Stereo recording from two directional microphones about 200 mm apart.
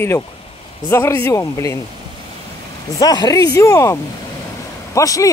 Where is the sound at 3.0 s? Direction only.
20° left (ahead or behind).